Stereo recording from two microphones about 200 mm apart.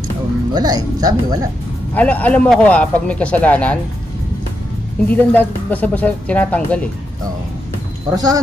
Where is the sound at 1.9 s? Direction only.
5° left (ahead or behind).